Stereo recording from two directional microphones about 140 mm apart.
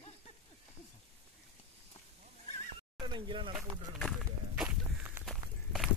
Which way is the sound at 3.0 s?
35° right (ahead or behind).